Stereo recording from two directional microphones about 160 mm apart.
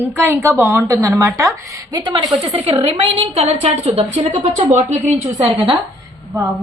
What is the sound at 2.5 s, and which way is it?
A woman's voice, 35° right (ahead or behind).